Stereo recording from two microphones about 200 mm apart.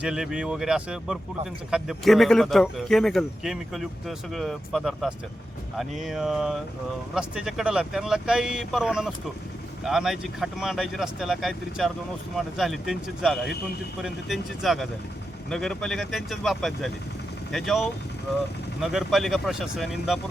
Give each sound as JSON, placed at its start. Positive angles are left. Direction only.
{"t": 0.0, "sound": "speech", "side_deg": -5}